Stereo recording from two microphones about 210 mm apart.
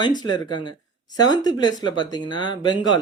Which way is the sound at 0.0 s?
20° left (ahead or behind).